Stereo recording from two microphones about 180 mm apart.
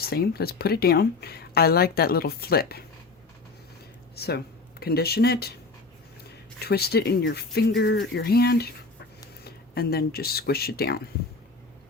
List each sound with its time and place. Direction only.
0.0 s speech: 60° left (ahead or behind)
4.1 s speech: 65° left (ahead or behind)